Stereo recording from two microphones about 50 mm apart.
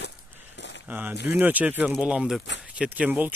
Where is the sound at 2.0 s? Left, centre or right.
Centre.